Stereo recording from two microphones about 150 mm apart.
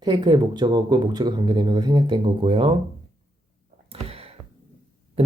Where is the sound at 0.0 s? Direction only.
30° right (ahead or behind).